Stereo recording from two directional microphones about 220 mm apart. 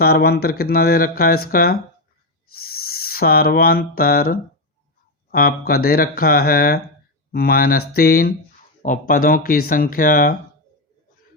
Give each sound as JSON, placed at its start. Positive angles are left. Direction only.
{"t": 0.0, "sound": "speech", "side_deg": 45}
{"t": 2.6, "sound": "a sound", "side_deg": 45}
{"t": 5.3, "sound": "speech", "side_deg": 40}